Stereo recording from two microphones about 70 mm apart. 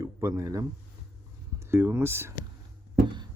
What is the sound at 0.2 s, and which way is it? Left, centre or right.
Speech, right.